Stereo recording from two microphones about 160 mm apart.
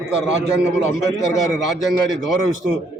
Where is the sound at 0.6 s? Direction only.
5° right (ahead or behind).